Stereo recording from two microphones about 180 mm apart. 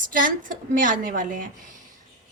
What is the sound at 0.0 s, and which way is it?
A woman's voice, 50° right (ahead or behind).